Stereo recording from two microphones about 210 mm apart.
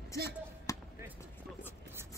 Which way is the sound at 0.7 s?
15° left (ahead or behind).